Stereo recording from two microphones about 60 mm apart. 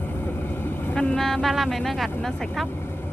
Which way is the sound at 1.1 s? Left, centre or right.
Centre.